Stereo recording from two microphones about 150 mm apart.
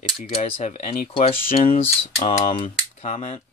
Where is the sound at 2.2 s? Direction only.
45° left (ahead or behind).